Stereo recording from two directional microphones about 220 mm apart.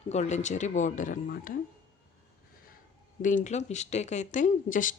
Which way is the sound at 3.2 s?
35° left (ahead or behind).